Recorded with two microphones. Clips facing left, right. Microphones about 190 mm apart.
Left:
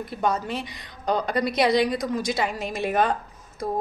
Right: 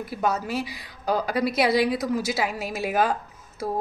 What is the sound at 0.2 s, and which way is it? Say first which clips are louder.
A woman's voice: even; 5° right (ahead or behind).